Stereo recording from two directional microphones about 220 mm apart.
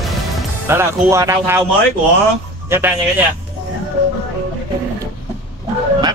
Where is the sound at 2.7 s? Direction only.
10° right (ahead or behind).